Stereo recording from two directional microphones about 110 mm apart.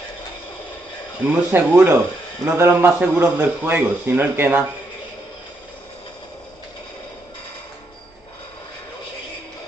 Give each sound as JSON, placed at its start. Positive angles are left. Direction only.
{"t": 1.3, "sound": "a man's voice", "side_deg": -15}